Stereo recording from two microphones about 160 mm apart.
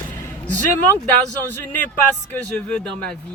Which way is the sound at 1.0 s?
10° left (ahead or behind).